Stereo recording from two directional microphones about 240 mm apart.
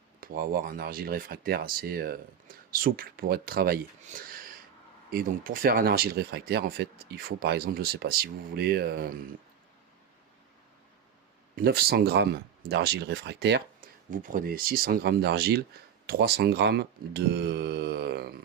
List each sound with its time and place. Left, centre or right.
0.2 s speech: right
11.5 s speech: right